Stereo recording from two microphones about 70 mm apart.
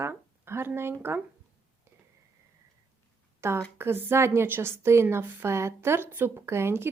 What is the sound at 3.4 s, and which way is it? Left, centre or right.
Speech, right.